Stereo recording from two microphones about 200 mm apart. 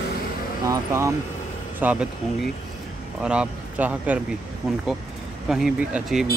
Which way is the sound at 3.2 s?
5° right (ahead or behind).